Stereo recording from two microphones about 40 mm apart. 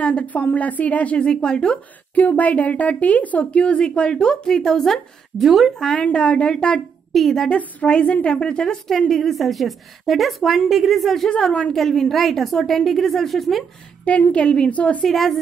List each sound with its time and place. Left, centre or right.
0.0 s a woman's voice: left
1.2 s a woman's voice: left
2.1 s a woman's voice: left
3.6 s a woman's voice: left
4.5 s speech: centre
5.4 s a woman's voice: centre
6.1 s a woman's voice: left
7.1 s speech: centre
7.5 s a woman's voice: left
8.8 s a woman's voice: centre
11.2 s a woman's voice: left
11.7 s a woman's voice: centre
14.0 s a woman's voice: left
15.0 s speech: centre